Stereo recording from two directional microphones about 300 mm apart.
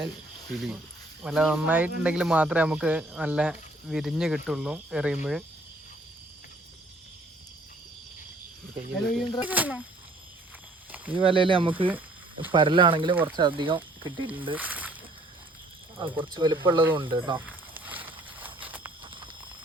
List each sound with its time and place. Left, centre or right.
0.5 s speech: centre
9.0 s speech: centre
10.9 s snake: centre
11.3 s speech: centre
11.9 s a sound: centre
12.5 s speech: centre
14.5 s speech: centre
16.0 s speech: centre
17.3 s snake: centre